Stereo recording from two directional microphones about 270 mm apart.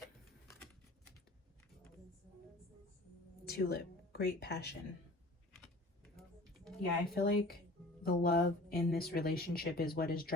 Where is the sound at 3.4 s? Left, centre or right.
Left.